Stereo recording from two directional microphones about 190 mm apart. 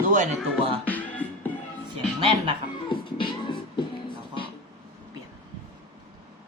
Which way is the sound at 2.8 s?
25° left (ahead or behind).